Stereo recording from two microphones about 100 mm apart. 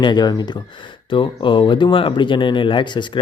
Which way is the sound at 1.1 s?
55° left (ahead or behind).